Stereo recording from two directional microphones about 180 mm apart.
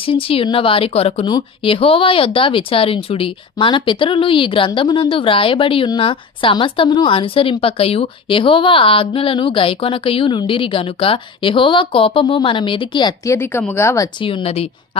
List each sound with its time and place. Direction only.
0.0 s speech: 30° left (ahead or behind)
14.2 s speech: 30° left (ahead or behind)